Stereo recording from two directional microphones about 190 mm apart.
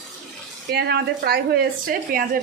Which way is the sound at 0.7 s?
60° right (ahead or behind).